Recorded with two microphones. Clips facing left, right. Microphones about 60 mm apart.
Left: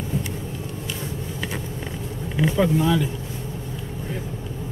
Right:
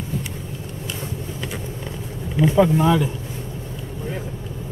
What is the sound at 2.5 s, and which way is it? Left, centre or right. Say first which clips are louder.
Speech: right 4 dB; right.